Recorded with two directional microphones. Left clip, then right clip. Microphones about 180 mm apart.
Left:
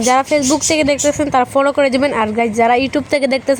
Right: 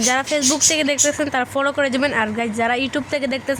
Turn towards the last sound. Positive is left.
turn(degrees=30)  # may be behind; listen again after turning